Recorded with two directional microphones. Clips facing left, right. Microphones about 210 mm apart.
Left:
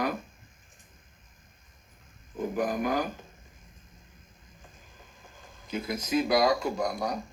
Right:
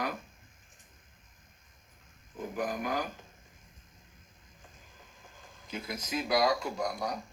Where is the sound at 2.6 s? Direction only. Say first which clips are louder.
Left 5 dB; 45° left (ahead or behind).